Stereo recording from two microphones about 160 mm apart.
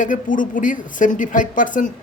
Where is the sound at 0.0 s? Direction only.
55° left (ahead or behind).